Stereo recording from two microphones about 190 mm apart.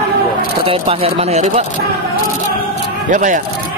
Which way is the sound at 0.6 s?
30° right (ahead or behind).